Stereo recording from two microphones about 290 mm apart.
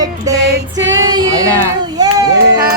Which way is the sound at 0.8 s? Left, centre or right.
Right.